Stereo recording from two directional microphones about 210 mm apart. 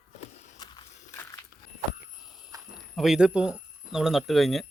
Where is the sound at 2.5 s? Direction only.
15° right (ahead or behind).